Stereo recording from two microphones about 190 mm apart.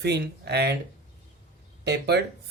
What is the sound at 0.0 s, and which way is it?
Speech, 60° right (ahead or behind).